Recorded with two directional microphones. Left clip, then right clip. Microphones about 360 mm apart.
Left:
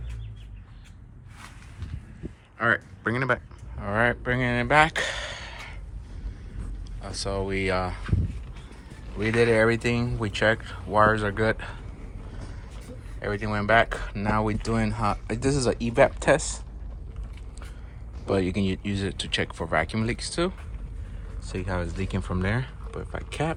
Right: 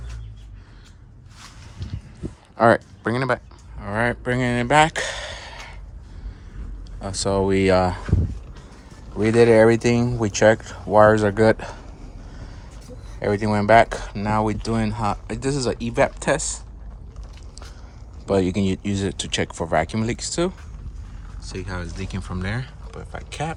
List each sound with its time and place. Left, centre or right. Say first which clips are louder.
2.6 s speech: right 8 dB; centre
7.1 s speech: right 9 dB; right
9.1 s speech: right 7 dB; centre
13.1 s speech: right 7 dB; centre
18.3 s speech: right 5 dB; centre
21.4 s speech: left 1 dB; centre